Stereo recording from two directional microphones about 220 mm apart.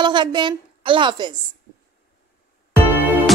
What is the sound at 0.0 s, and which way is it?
A woman's voice, 20° right (ahead or behind).